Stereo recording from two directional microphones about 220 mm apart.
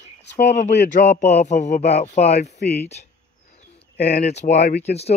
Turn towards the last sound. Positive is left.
turn(degrees=30)  # may be behind; listen again after turning